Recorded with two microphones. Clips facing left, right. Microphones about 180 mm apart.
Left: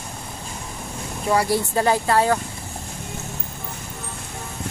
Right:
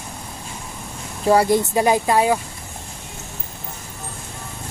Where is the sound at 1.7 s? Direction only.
15° right (ahead or behind).